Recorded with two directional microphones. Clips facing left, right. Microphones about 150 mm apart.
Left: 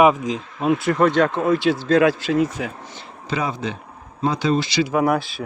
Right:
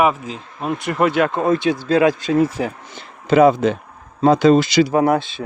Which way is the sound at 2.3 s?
30° right (ahead or behind).